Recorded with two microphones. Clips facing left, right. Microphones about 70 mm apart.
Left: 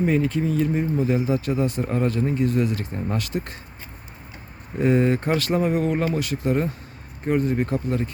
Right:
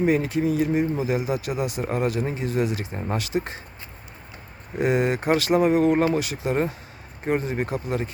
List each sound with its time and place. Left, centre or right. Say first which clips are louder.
0.0 s speech: even; right
4.8 s speech: left 2 dB; centre